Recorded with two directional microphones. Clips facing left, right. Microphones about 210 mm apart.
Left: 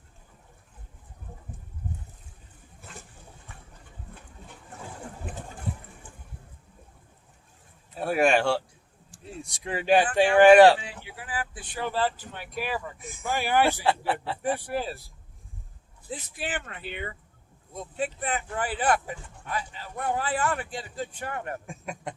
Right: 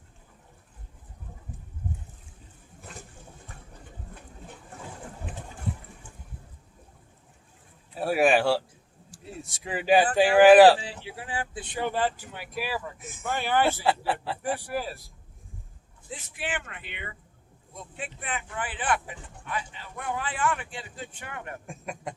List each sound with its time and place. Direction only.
7.9 s speech: 5° right (ahead or behind)
10.8 s speech: 30° right (ahead or behind); by 13.3 s centre (ahead or behind)
13.3 s speech: 10° left (ahead or behind)
13.8 s speech: centre (ahead or behind)
14.4 s speech: 25° left (ahead or behind)
16.0 s speech: 35° left (ahead or behind)
21.7 s speech: centre (ahead or behind)